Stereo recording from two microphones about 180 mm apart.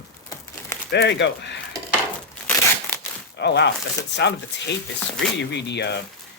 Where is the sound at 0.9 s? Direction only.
70° left (ahead or behind).